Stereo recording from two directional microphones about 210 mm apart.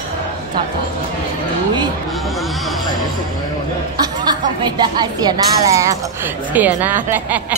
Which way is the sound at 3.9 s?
20° right (ahead or behind).